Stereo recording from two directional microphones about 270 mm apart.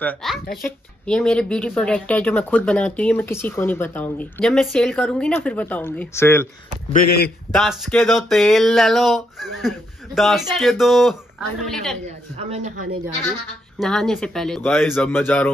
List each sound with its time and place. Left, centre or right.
0.0 s speech: centre
6.9 s a man's voice: left
7.5 s speech: centre
13.7 s speech: centre